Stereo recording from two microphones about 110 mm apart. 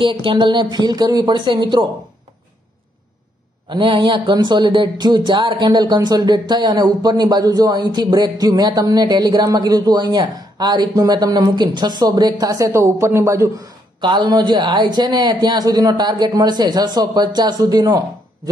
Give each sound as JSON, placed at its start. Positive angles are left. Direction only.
{"t": 0.0, "sound": "speech", "side_deg": -50}
{"t": 3.6, "sound": "speech", "side_deg": -45}
{"t": 14.0, "sound": "speech", "side_deg": -45}